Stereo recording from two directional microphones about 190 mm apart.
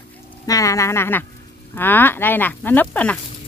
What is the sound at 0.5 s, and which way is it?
Speech, 15° left (ahead or behind).